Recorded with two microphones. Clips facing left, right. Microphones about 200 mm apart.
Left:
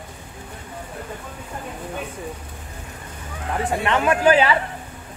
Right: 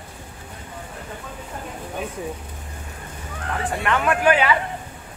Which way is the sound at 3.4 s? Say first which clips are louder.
Left 3 dB; centre (ahead or behind).